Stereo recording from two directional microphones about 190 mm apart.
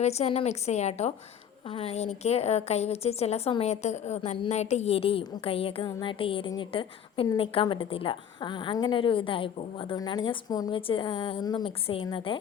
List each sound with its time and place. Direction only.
0.0 s a woman's voice: 35° left (ahead or behind)